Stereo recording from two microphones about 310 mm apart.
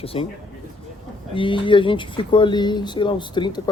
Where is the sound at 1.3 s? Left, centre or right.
Centre.